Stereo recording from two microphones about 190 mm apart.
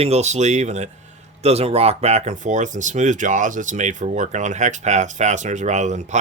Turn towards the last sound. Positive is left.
turn(degrees=-40)  # may be behind; listen again after turning